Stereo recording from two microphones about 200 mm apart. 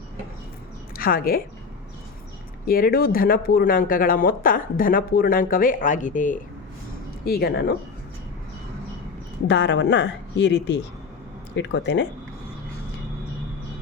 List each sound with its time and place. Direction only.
0.9 s a woman's voice: 45° left (ahead or behind)
2.6 s speech: 45° left (ahead or behind)
7.3 s speech: 50° left (ahead or behind)
9.5 s a woman's voice: 60° left (ahead or behind)